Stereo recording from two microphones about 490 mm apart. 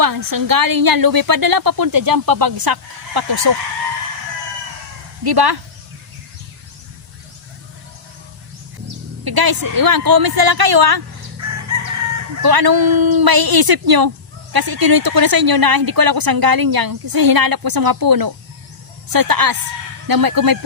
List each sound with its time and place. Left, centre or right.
0.0 s a woman's voice: right
5.2 s a woman's voice: right
9.2 s a woman's voice: right
11.4 s crowing: right
12.4 s a woman's voice: right